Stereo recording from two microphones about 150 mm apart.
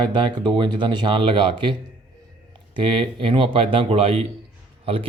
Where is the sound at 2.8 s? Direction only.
35° right (ahead or behind).